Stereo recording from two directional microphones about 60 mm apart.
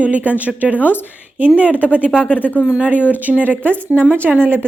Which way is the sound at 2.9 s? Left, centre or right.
Left.